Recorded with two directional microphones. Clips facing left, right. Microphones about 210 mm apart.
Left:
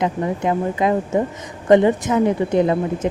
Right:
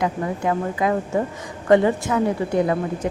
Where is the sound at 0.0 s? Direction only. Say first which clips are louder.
Left 2 dB; 20° left (ahead or behind).